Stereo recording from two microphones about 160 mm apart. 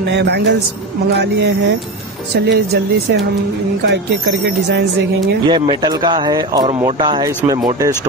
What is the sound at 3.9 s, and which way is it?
Speech, 90° right.